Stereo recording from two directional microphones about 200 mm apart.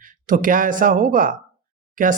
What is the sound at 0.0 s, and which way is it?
Speech, 40° right (ahead or behind).